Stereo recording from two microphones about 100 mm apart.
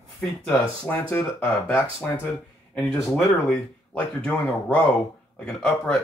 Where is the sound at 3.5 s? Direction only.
10° left (ahead or behind).